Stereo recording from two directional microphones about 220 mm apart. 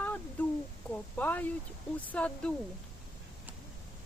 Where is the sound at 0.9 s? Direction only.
5° left (ahead or behind).